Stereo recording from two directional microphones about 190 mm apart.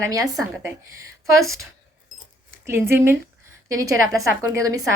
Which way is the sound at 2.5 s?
15° right (ahead or behind).